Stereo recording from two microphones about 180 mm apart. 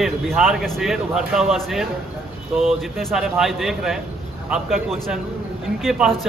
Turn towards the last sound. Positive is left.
turn(degrees=0)  # may be behind; listen again after turning